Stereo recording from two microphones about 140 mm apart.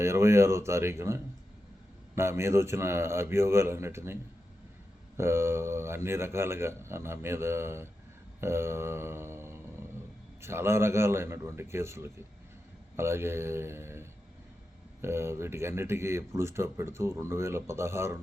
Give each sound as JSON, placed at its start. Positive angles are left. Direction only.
{"t": 0.0, "sound": "speech", "side_deg": -20}
{"t": 8.4, "sound": "a sound", "side_deg": -20}
{"t": 10.4, "sound": "speech", "side_deg": -20}